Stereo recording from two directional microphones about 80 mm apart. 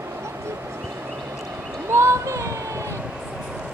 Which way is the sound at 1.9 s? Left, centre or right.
Right.